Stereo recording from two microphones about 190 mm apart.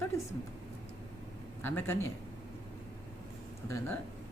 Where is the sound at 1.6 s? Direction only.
10° left (ahead or behind).